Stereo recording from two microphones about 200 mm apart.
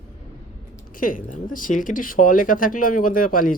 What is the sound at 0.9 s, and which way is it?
Speech, 45° left (ahead or behind).